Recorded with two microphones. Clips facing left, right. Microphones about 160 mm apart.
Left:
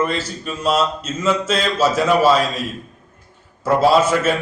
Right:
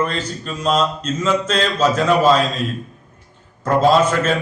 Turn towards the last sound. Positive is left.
turn(degrees=10)  # may be behind; listen again after turning